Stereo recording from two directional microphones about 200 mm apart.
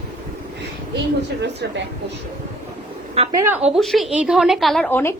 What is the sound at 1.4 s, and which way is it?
Speech, 60° right (ahead or behind).